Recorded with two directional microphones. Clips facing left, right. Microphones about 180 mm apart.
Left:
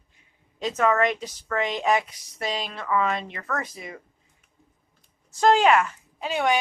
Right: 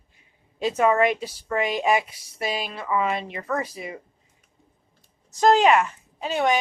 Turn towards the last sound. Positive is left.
turn(degrees=0)  # may be behind; listen again after turning